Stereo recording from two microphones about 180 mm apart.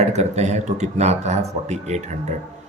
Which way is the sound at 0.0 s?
35° right (ahead or behind).